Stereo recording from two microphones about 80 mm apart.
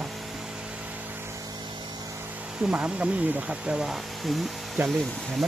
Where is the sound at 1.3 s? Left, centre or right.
Right.